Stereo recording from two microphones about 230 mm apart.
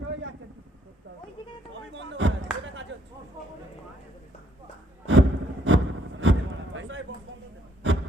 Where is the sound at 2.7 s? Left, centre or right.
Right.